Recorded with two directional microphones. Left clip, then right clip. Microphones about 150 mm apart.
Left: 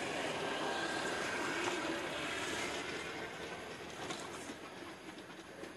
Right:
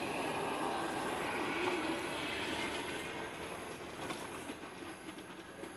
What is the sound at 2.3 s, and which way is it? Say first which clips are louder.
Vehicle: right 1 dB; 45° left (ahead or behind).